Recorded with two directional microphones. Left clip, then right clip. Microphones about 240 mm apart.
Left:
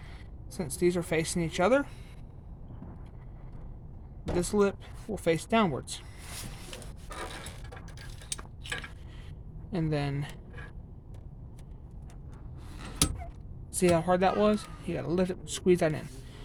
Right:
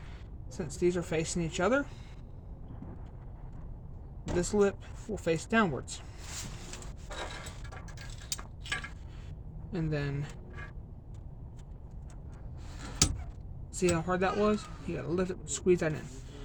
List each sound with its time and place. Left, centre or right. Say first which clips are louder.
0.5 s speech: left 2 dB; left
4.4 s speech: left 1 dB; left
9.7 s speech: left 3 dB; left
13.7 s speech: left 5 dB; left